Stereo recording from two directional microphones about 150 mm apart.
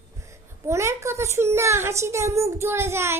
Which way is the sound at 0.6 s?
20° right (ahead or behind).